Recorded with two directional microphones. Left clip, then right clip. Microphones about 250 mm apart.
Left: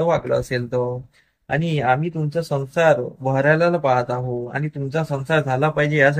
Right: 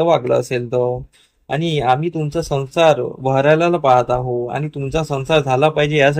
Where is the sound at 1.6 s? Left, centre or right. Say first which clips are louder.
Right 4 dB; centre.